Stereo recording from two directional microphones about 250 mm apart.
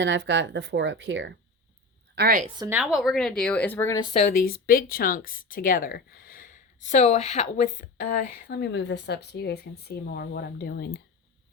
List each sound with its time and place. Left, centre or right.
0.0 s speech: right
2.1 s a woman's voice: right
2.6 s speech: centre
4.1 s speech: left